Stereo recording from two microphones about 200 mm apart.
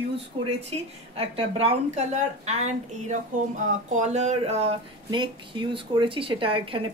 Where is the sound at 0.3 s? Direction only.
25° right (ahead or behind).